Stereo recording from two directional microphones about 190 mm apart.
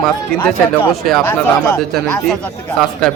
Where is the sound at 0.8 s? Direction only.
5° left (ahead or behind).